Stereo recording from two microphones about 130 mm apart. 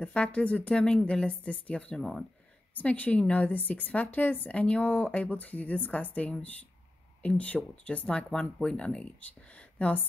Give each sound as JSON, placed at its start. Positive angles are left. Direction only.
{"t": 0.0, "sound": "a woman's voice", "side_deg": 10}